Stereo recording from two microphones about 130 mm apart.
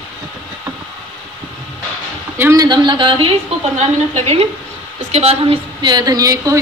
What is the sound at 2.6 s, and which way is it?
Speech, 35° right (ahead or behind).